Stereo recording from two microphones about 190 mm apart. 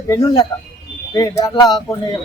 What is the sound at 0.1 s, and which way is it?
A man's voice, 20° left (ahead or behind).